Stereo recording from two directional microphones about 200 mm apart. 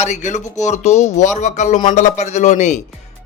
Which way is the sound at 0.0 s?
35° left (ahead or behind).